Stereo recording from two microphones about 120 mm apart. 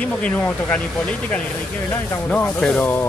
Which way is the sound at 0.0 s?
10° left (ahead or behind).